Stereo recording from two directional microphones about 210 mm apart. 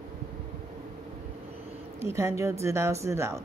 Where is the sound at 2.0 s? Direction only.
15° right (ahead or behind).